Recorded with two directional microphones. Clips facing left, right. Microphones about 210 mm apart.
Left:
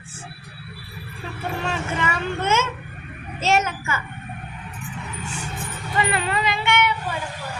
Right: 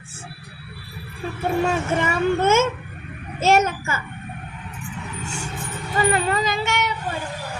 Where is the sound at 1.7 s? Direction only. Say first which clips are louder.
Right 4 dB; 50° right (ahead or behind).